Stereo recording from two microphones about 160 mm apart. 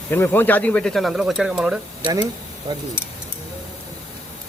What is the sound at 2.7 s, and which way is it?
Speech, 25° right (ahead or behind).